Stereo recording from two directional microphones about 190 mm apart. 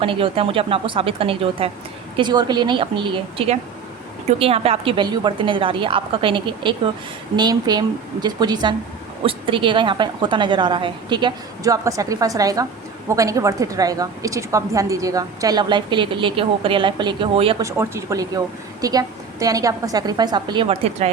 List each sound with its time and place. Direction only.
0.0 s a woman's voice: 30° right (ahead or behind)
17.6 s a woman's voice: 15° right (ahead or behind); by 21.1 s 30° right (ahead or behind)